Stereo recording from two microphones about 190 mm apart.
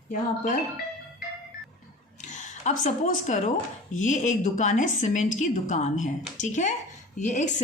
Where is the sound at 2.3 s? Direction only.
40° left (ahead or behind).